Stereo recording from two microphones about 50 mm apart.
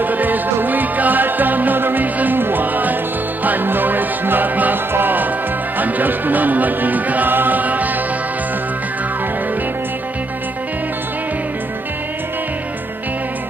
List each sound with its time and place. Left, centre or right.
0.0 s music: right